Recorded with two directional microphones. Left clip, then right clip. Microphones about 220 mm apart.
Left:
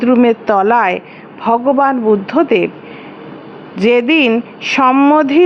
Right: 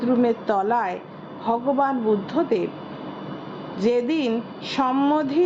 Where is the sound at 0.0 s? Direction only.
25° left (ahead or behind).